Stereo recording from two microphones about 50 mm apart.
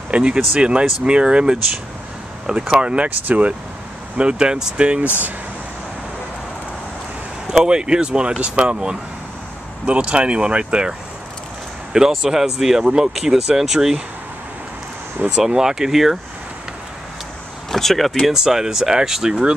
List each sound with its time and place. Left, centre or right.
0.1 s speech: right
2.7 s speech: right
4.2 s speech: centre
7.4 s speech: centre
11.9 s speech: centre
15.2 s speech: centre
17.6 s speech: centre
18.3 s speech: centre